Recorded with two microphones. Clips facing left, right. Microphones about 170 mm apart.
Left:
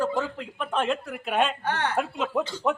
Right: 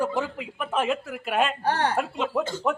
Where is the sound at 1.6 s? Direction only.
35° right (ahead or behind).